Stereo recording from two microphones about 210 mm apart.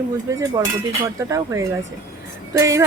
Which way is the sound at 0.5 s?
15° right (ahead or behind).